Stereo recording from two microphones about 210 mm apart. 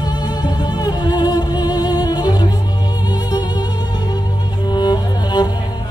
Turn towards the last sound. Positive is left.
turn(degrees=20)  # may be behind; listen again after turning